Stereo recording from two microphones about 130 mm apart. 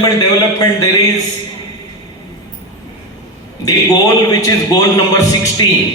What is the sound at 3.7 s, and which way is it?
A man's voice, 30° left (ahead or behind).